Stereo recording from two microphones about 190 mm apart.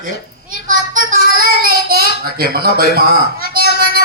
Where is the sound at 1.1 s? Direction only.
50° right (ahead or behind).